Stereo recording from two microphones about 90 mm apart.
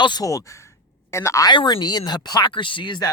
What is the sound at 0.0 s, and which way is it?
Speech, 55° left (ahead or behind).